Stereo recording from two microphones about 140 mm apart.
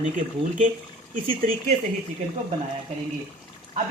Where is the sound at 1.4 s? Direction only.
80° right.